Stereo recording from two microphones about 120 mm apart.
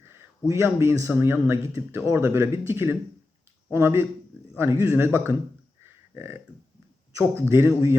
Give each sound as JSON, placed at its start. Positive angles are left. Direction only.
{"t": 0.4, "sound": "a man's voice", "side_deg": -25}